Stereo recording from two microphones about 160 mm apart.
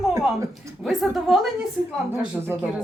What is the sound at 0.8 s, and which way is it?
Speech, centre (ahead or behind).